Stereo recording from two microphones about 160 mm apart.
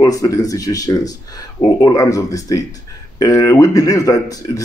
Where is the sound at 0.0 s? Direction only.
20° left (ahead or behind).